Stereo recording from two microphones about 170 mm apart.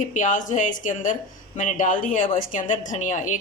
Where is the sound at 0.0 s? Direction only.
50° left (ahead or behind).